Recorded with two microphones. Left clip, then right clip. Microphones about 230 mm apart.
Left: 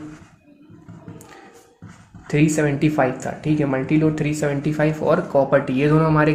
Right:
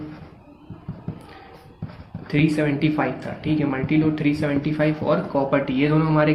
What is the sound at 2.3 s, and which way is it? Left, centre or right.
Speech, left.